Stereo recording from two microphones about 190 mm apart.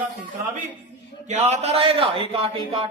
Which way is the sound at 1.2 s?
35° right (ahead or behind).